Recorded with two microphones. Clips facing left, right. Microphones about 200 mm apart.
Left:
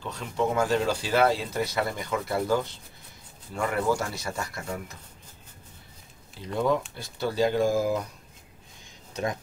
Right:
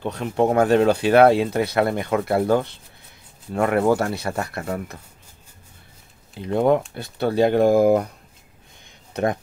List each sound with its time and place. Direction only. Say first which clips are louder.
0.0 s speech: right 7 dB; 60° right (ahead or behind)
6.4 s speech: right 7 dB; 60° right (ahead or behind)
9.1 s speech: right 8 dB; 60° right (ahead or behind)